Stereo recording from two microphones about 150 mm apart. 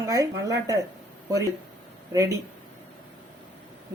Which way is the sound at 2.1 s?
20° right (ahead or behind).